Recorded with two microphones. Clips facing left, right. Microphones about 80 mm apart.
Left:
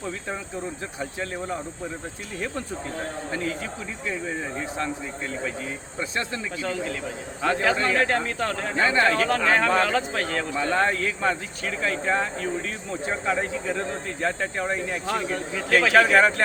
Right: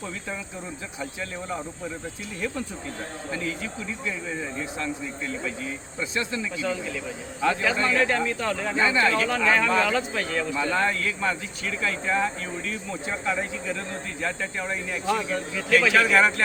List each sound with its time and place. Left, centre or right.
3.3 s speech: left
5.6 s speech: left